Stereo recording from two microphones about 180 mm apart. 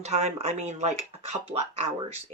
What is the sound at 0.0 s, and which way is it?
Speech, 35° right (ahead or behind).